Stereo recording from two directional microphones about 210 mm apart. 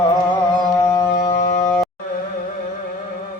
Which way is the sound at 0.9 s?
15° left (ahead or behind).